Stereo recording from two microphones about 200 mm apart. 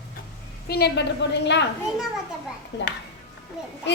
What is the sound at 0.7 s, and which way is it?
Speech, 55° left (ahead or behind).